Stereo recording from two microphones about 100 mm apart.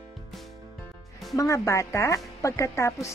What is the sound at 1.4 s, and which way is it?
Speech, 30° left (ahead or behind).